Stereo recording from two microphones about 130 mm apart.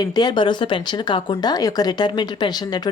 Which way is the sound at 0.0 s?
30° left (ahead or behind).